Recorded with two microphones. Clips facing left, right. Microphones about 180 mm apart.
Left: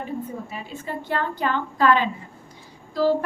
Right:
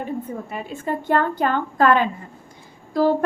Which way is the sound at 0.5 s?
50° right (ahead or behind).